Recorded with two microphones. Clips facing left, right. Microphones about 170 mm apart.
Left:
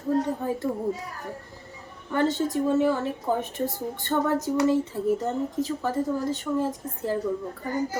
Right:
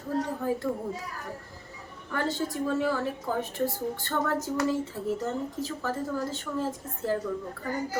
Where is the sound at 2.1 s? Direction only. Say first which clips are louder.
Left 6 dB; 20° left (ahead or behind).